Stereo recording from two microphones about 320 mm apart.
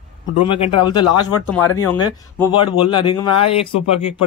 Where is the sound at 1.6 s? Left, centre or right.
Left.